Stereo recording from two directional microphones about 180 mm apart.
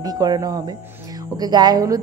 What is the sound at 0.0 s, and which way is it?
A woman's voice, 20° right (ahead or behind).